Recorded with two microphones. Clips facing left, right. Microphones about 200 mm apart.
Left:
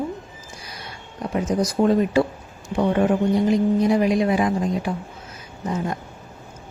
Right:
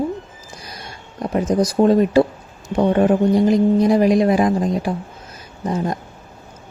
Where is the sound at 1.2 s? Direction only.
40° right (ahead or behind).